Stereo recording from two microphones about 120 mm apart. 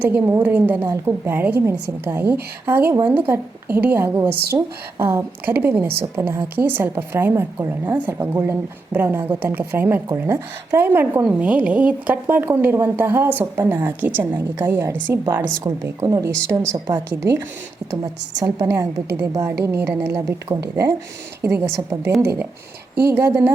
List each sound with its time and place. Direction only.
0.0 s a woman's voice: 15° right (ahead or behind)
17.9 s a woman's voice: 30° right (ahead or behind)